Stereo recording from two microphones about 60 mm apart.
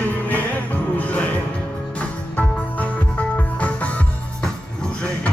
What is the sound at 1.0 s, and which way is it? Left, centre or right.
Music, left.